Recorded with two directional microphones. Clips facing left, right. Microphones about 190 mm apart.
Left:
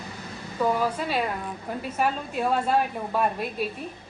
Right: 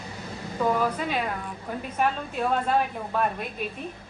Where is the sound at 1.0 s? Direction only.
5° left (ahead or behind).